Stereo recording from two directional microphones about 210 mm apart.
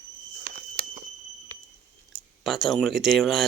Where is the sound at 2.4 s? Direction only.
Centre (ahead or behind).